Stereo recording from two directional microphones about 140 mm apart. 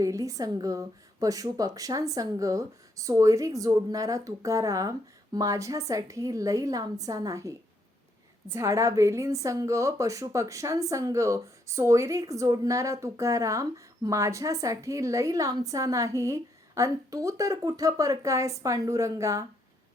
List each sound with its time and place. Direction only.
0.0 s a woman's voice: 25° right (ahead or behind)